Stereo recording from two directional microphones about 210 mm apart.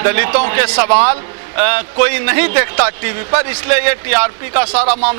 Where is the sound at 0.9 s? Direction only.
25° right (ahead or behind).